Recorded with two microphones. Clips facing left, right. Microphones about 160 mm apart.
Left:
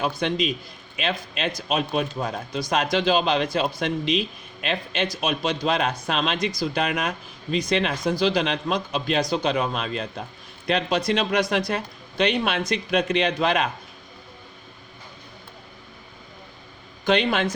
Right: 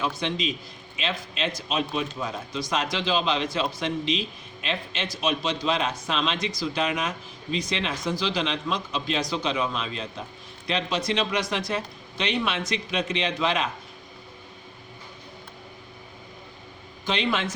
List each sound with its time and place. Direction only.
0.0 s speech: 55° left (ahead or behind)
17.1 s speech: 55° left (ahead or behind)